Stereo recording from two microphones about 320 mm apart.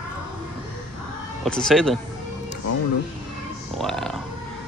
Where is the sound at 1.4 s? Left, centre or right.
Centre.